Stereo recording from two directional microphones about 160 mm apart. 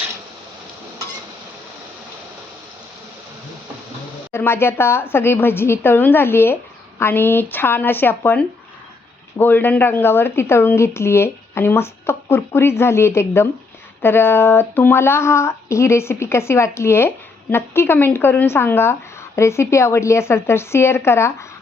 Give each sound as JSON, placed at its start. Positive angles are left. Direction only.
{"t": 4.3, "sound": "speech", "side_deg": 15}